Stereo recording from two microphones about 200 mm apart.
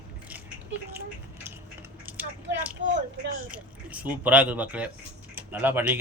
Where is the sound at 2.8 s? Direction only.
75° right (ahead or behind).